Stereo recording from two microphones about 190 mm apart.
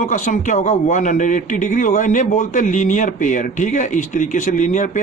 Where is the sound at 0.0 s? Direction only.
40° left (ahead or behind).